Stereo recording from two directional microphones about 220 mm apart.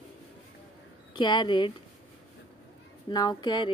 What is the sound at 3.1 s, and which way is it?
Speech, 20° left (ahead or behind).